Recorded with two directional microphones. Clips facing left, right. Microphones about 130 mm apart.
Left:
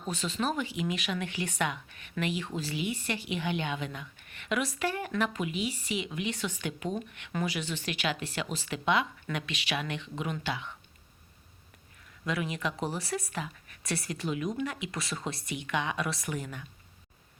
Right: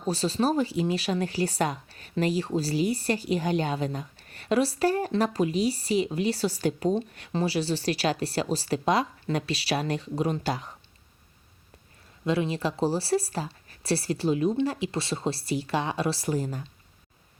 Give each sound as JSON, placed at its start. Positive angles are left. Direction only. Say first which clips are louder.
{"t": 0.0, "sound": "speech", "louder": "right 7 dB", "side_deg": -35}
{"t": 12.2, "sound": "speech", "louder": "right 6 dB", "side_deg": -30}